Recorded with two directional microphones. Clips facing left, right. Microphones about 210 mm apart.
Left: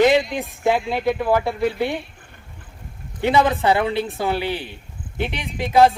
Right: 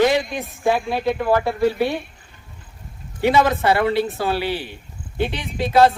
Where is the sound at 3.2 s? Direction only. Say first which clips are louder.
Right 1 dB; 15° left (ahead or behind).